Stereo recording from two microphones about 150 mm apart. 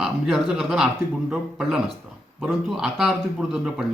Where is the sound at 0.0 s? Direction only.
Centre (ahead or behind).